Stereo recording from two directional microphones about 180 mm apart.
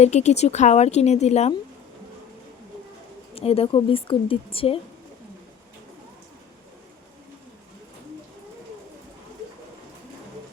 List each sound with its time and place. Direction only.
0.0 s speech: 40° left (ahead or behind)
3.3 s speech: 30° left (ahead or behind)